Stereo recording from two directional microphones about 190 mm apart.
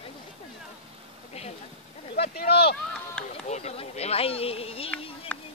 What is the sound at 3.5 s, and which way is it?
Speech, 35° left (ahead or behind).